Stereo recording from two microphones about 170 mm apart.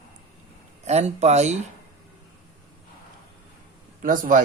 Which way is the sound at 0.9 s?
40° right (ahead or behind).